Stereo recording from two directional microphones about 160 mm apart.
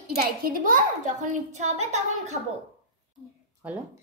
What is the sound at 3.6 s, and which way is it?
Speech, 10° right (ahead or behind).